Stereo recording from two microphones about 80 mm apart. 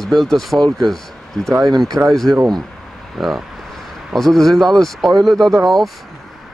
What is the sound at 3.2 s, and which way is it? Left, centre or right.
Speech, centre.